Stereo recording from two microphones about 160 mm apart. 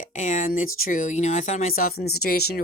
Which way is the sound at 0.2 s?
50° left (ahead or behind).